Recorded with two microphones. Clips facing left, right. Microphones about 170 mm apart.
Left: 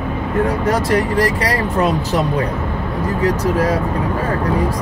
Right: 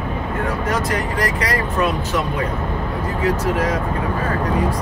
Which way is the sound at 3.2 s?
35° left (ahead or behind).